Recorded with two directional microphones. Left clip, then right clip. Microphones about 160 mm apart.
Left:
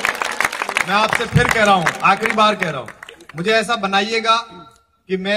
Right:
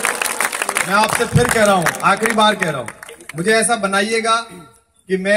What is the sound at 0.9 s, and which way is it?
A man's voice, 30° right (ahead or behind).